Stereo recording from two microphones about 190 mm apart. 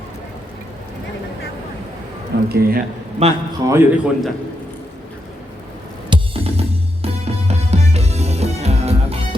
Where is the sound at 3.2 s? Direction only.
35° right (ahead or behind).